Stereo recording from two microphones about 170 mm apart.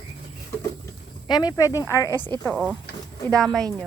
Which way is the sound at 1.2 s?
25° left (ahead or behind).